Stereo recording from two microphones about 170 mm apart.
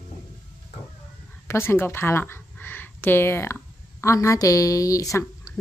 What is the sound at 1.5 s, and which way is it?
Speech, 15° left (ahead or behind).